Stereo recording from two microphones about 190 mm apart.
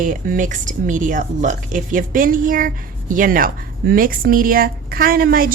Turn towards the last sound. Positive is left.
turn(degrees=-50)  # may be behind; listen again after turning